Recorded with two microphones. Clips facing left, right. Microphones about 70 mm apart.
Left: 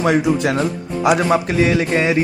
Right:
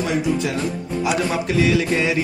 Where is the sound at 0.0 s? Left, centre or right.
Left.